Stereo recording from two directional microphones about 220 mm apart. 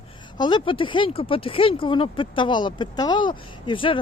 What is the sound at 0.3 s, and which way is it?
Speech, 20° left (ahead or behind).